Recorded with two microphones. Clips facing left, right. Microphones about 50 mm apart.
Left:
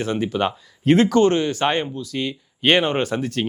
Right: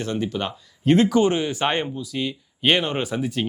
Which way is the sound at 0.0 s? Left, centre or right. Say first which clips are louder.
Left 4 dB; centre.